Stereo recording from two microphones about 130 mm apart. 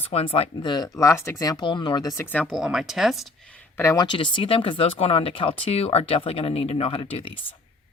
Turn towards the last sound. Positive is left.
turn(degrees=45)  # may be behind; listen again after turning